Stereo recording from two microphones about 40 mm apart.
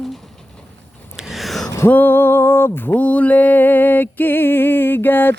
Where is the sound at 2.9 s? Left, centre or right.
Left.